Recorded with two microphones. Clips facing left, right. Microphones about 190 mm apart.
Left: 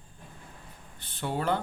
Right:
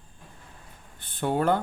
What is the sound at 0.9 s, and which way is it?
Speech, 50° right (ahead or behind).